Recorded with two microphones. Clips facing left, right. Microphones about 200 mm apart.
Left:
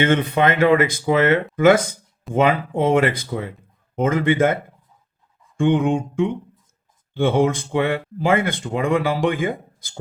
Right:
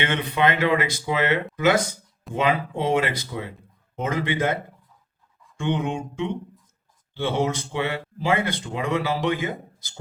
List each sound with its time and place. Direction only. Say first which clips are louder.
0.0 s a man's voice: left 5 dB; 50° left (ahead or behind)
5.5 s a man's voice: left 8 dB; 50° left (ahead or behind)